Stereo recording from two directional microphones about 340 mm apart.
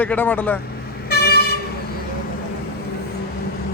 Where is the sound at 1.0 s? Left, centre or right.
Left.